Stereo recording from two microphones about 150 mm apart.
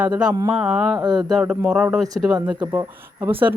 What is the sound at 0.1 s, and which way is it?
Speech, 25° right (ahead or behind).